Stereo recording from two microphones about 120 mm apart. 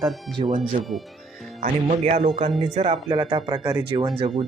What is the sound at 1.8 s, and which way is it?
Speech, 65° right (ahead or behind).